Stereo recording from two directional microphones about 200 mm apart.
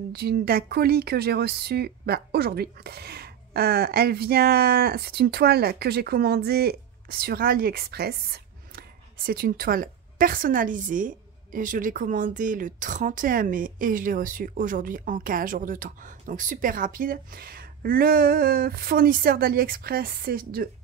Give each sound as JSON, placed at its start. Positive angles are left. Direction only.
{"t": 0.1, "sound": "speech", "side_deg": -50}